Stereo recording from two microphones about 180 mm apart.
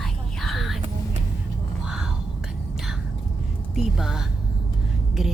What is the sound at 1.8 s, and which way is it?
Whispering, 5° right (ahead or behind).